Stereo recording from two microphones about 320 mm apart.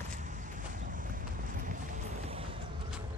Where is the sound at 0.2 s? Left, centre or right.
Right.